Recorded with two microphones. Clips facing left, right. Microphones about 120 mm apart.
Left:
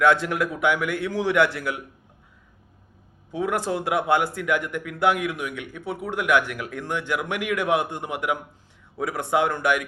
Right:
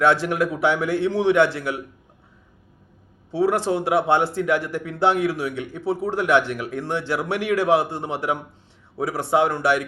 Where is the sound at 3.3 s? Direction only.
30° right (ahead or behind).